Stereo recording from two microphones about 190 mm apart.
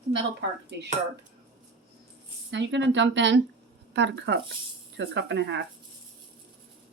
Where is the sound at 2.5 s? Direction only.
70° right (ahead or behind).